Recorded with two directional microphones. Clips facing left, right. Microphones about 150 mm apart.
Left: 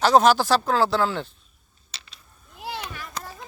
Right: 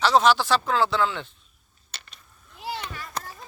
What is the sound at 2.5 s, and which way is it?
Arrow, 55° left (ahead or behind).